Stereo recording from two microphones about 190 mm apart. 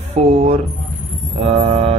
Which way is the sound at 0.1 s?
35° right (ahead or behind).